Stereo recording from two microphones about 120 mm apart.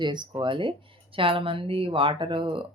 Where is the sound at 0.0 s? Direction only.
40° right (ahead or behind).